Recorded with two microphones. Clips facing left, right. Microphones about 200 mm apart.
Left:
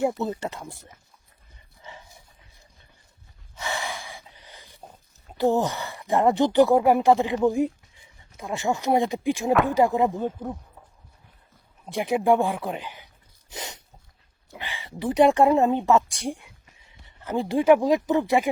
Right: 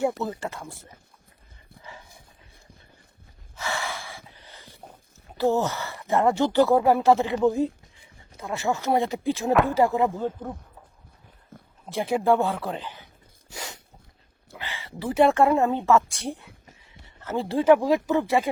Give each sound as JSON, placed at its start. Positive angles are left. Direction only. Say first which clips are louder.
{"t": 0.0, "sound": "speech", "louder": "left 1 dB", "side_deg": 20}
{"t": 3.5, "sound": "gasp", "louder": "even", "side_deg": 15}
{"t": 5.4, "sound": "speech", "louder": "left 1 dB", "side_deg": 15}
{"t": 11.5, "sound": "a sound", "louder": "right 13 dB", "side_deg": -50}
{"t": 11.9, "sound": "speech", "louder": "left 1 dB", "side_deg": 15}
{"t": 13.5, "sound": "dog", "louder": "left 1 dB", "side_deg": 20}
{"t": 14.5, "sound": "a woman's voice", "louder": "even", "side_deg": 15}